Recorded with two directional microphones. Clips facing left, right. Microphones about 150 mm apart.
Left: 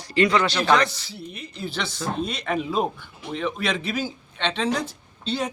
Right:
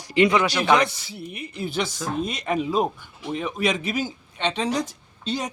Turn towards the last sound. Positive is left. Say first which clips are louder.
# even
turn(degrees=-45)  # may be behind; listen again after turning